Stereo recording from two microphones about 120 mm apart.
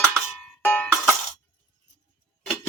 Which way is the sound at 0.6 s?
15° left (ahead or behind).